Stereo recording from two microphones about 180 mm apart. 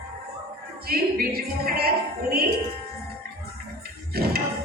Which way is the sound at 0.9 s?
55° right (ahead or behind).